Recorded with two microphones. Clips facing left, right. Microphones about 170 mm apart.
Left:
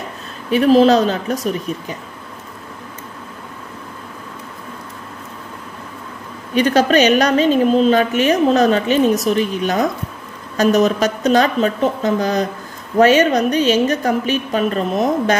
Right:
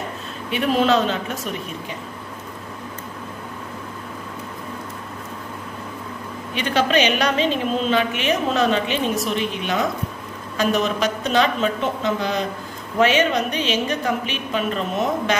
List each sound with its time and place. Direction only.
0.5 s a woman's voice: 40° left (ahead or behind)
6.5 s a woman's voice: 40° left (ahead or behind)